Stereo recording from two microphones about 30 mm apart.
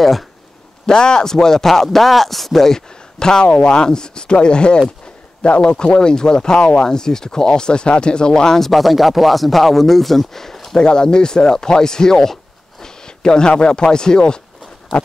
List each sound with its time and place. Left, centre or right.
0.8 s speech: left; by 2.8 s centre
2.9 s speech: left
8.5 s speech: centre
10.8 s speech: left